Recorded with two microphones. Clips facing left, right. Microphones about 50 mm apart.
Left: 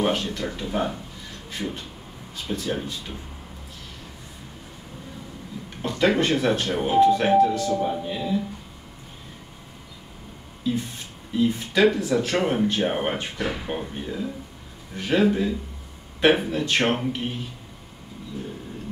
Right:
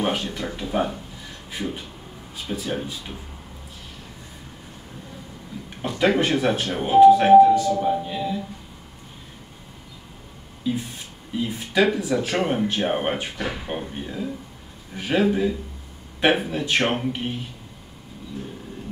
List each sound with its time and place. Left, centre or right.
0.0 s speech: centre
2.4 s speech: centre
5.8 s speech: centre
10.6 s speech: centre